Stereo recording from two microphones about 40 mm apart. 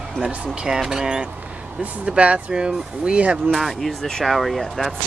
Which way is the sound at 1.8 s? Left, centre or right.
Right.